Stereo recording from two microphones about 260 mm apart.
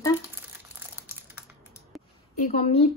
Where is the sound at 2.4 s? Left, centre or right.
Left.